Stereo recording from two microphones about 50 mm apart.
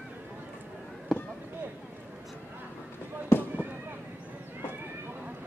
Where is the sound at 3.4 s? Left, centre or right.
Right.